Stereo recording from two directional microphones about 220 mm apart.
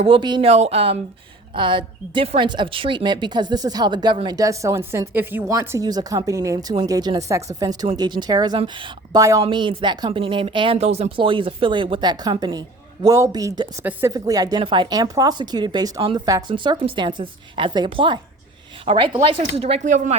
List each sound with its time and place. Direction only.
0.0 s a woman's voice: 20° right (ahead or behind)